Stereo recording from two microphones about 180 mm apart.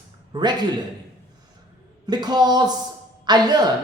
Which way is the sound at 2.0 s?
25° right (ahead or behind).